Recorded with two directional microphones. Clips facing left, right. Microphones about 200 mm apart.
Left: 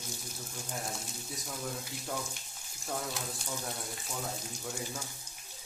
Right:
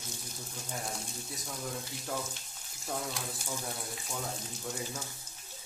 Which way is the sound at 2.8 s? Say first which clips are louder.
Even; 5° right (ahead or behind).